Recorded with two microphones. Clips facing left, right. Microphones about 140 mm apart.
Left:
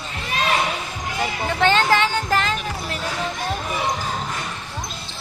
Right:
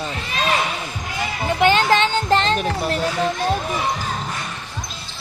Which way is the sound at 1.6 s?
15° right (ahead or behind).